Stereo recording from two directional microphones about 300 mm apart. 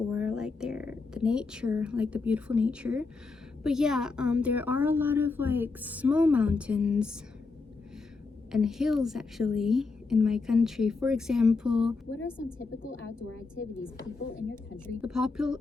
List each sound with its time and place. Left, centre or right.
0.1 s a woman's voice: centre
8.5 s a woman's voice: centre
12.1 s a woman's voice: left
15.0 s a woman's voice: centre